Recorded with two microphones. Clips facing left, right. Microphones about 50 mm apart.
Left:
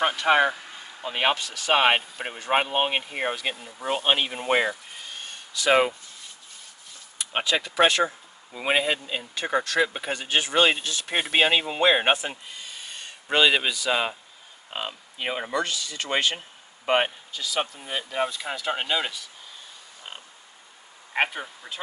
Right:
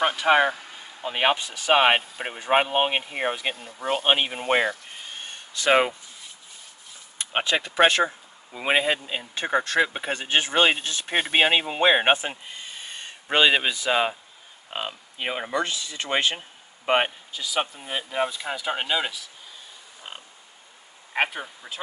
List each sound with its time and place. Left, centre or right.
0.0 s speech: centre
4.0 s speech: centre
5.0 s a sound: right
5.7 s speech: centre
7.5 s speech: right
9.3 s speech: right
11.1 s speech: centre
14.7 s speech: centre
15.6 s speech: centre
21.1 s speech: centre